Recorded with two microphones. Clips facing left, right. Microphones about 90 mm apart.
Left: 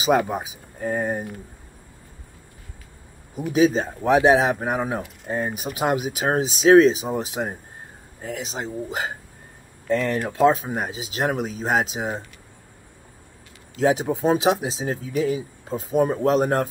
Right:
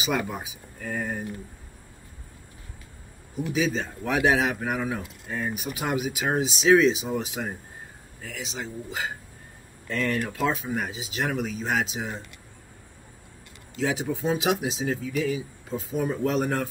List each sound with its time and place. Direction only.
0.0 s speech: 35° left (ahead or behind)
3.3 s speech: 40° left (ahead or behind)
13.7 s speech: 40° left (ahead or behind)